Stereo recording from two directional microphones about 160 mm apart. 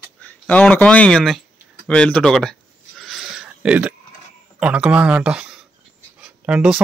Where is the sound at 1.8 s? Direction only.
5° left (ahead or behind).